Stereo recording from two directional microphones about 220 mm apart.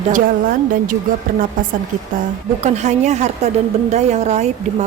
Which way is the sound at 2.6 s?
30° right (ahead or behind).